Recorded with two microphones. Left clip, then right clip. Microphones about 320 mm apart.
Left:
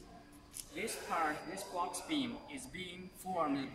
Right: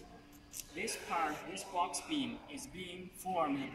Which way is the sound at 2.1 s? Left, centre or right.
Centre.